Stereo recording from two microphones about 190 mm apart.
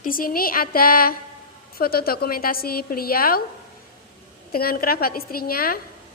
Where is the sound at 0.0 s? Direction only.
50° left (ahead or behind).